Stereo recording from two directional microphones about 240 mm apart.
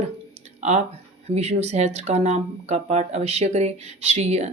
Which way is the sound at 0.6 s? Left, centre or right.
Right.